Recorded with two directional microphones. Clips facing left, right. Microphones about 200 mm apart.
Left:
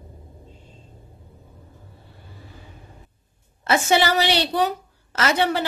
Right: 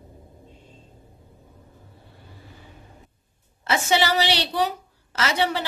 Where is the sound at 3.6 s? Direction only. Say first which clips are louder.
Left 3 dB; 50° left (ahead or behind).